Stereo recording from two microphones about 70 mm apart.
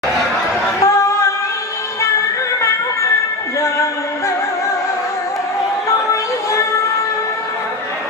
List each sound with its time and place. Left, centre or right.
0.8 s yodeling: left
3.6 s music: left